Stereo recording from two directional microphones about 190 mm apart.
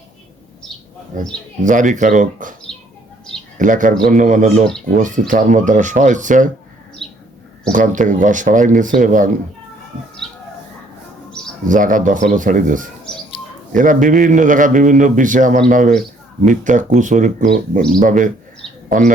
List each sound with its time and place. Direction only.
1.6 s a man's voice: 40° right (ahead or behind)
3.6 s a man's voice: 45° right (ahead or behind)
7.0 s bird: centre (ahead or behind)
7.7 s a man's voice: 40° right (ahead or behind)
10.2 s bird: centre (ahead or behind)
11.7 s a man's voice: 45° right (ahead or behind)